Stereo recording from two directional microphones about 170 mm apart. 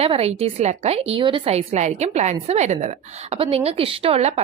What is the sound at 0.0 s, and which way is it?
A woman's voice, 35° right (ahead or behind).